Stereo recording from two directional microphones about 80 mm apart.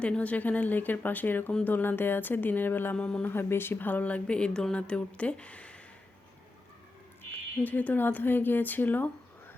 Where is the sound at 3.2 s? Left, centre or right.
Left.